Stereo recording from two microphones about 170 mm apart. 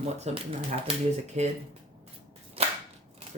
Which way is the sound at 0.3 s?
40° right (ahead or behind).